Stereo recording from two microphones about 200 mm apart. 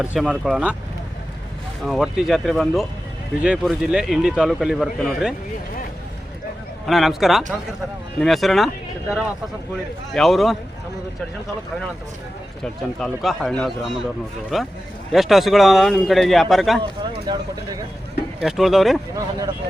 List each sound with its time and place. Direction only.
0.0 s a man's voice: 5° right (ahead or behind)
1.8 s a man's voice: centre (ahead or behind)
6.8 s a man's voice: centre (ahead or behind)
12.6 s a man's voice: centre (ahead or behind)
17.3 s speech: 20° right (ahead or behind)
18.3 s a man's voice: centre (ahead or behind)